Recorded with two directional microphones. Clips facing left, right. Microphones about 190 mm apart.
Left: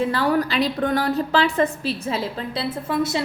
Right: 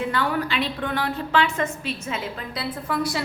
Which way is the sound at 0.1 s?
35° left (ahead or behind).